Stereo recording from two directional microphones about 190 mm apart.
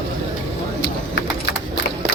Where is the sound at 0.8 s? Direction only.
65° left (ahead or behind).